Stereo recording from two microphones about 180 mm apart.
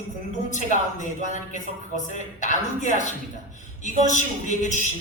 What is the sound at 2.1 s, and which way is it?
Speech, 45° left (ahead or behind).